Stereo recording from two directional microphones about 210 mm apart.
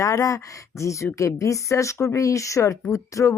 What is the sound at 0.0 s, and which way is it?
Speech, 15° left (ahead or behind).